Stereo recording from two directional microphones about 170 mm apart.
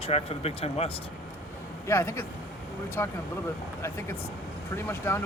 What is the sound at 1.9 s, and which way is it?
Speech, 15° left (ahead or behind).